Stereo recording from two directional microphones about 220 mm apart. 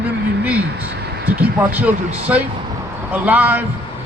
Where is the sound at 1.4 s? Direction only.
5° right (ahead or behind).